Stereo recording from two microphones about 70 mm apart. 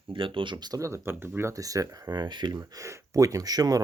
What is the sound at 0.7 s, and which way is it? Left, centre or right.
Speech, right.